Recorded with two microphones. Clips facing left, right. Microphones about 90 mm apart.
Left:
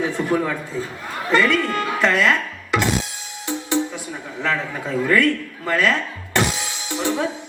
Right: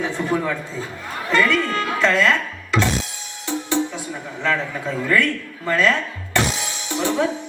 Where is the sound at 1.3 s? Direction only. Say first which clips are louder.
Left 1 dB; 20° left (ahead or behind).